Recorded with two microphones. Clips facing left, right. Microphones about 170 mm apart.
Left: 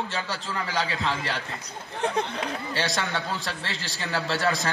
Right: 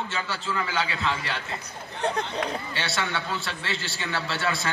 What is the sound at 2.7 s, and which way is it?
A man's voice, 40° left (ahead or behind).